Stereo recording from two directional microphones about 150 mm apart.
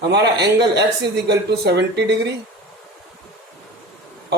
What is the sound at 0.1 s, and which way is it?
A man's voice, 90° right.